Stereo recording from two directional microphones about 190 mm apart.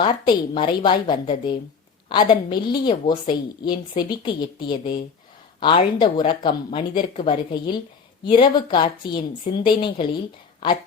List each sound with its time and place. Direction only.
0.0 s a woman's voice: 25° left (ahead or behind)